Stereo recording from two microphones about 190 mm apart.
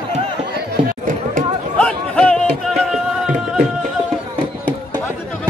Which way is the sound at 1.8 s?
5° left (ahead or behind).